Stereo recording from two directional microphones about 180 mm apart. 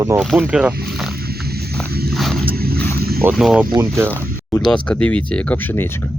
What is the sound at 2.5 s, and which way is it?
Vehicle, 60° right (ahead or behind).